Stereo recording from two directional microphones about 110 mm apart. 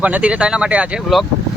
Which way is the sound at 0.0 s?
10° right (ahead or behind).